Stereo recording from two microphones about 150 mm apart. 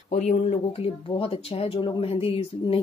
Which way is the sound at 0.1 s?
45° left (ahead or behind).